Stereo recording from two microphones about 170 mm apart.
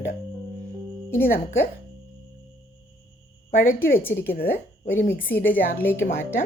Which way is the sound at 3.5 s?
55° left (ahead or behind).